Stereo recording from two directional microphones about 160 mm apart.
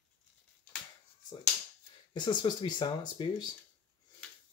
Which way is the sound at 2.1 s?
30° left (ahead or behind).